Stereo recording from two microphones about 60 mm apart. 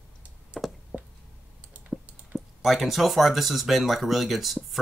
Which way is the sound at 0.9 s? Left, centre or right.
Centre.